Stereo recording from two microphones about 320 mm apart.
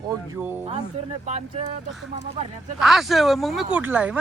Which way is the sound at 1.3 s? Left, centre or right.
Right.